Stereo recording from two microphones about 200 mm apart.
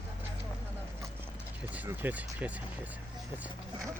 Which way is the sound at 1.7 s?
10° right (ahead or behind).